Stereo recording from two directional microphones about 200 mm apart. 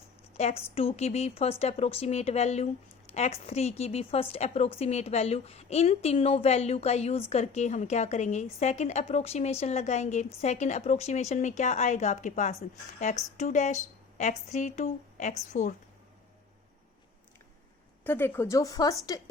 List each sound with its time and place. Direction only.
0.3 s a woman's voice: 30° left (ahead or behind)
18.0 s a woman's voice: 10° left (ahead or behind)